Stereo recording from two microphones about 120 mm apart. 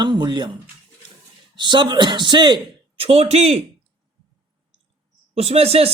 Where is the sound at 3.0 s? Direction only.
55° right (ahead or behind).